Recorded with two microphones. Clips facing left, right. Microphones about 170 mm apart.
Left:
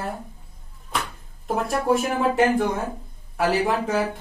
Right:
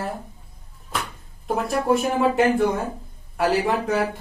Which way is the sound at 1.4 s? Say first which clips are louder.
Right 1 dB; centre (ahead or behind).